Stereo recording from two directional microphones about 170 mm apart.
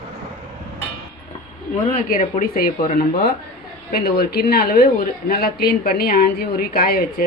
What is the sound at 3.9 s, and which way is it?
A woman's voice, 70° left (ahead or behind).